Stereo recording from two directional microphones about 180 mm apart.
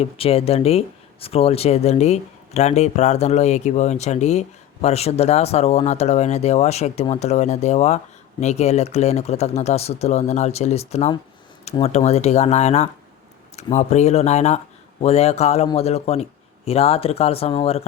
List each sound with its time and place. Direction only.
0.0 s speech: 35° left (ahead or behind)